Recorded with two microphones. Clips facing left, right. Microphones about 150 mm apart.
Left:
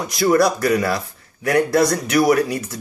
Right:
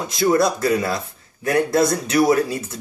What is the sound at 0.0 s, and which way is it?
A man's voice, 25° right (ahead or behind).